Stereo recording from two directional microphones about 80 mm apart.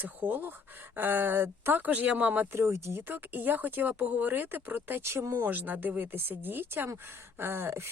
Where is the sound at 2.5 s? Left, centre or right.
Right.